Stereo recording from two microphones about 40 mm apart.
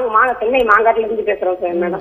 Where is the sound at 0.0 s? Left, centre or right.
Left.